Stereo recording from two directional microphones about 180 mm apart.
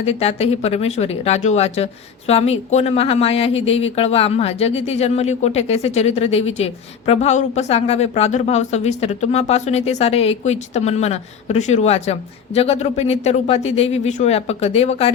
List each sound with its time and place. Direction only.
0.0 s a woman's voice: 35° left (ahead or behind)